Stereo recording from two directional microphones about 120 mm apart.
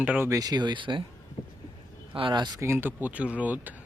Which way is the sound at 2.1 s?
45° right (ahead or behind).